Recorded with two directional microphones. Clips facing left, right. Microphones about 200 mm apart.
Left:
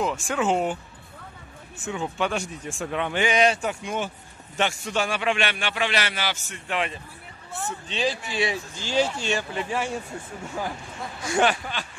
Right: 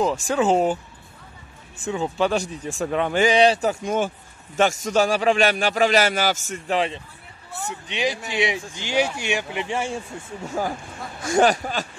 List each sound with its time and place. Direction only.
0.0 s a man's voice: 35° right (ahead or behind)
1.9 s a man's voice: 35° right (ahead or behind)
7.9 s speech: 15° right (ahead or behind)
10.6 s a man's voice: 40° right (ahead or behind)